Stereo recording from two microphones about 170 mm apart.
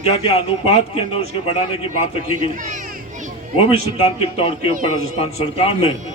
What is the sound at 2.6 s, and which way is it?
Music, 50° right (ahead or behind).